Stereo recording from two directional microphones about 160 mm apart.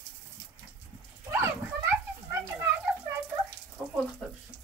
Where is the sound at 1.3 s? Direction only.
15° right (ahead or behind).